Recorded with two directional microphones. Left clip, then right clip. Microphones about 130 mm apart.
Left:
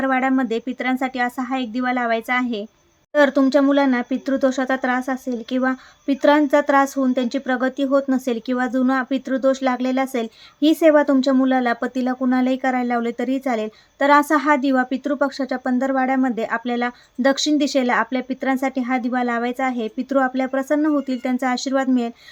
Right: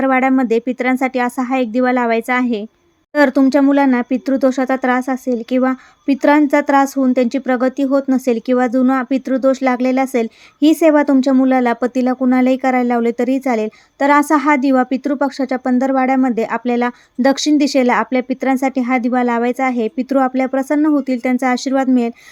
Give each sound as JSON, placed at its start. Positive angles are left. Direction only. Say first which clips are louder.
{"t": 0.0, "sound": "speech", "louder": "right 5 dB", "side_deg": -45}